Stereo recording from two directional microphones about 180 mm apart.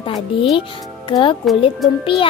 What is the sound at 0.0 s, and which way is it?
A child's voice, 30° left (ahead or behind).